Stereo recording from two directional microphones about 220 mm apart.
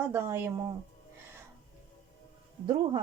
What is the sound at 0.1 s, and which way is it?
Speech, 10° right (ahead or behind).